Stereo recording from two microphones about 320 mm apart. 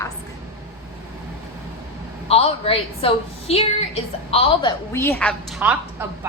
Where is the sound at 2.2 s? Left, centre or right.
Centre.